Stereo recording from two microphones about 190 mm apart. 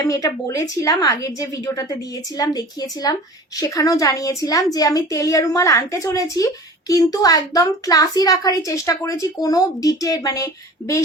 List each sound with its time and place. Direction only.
0.0 s a woman's voice: 20° left (ahead or behind)